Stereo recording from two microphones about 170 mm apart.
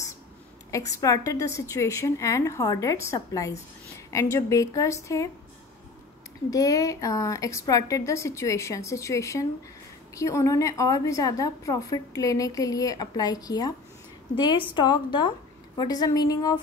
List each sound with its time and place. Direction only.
0.7 s a woman's voice: 20° left (ahead or behind)
6.5 s a woman's voice: 20° left (ahead or behind)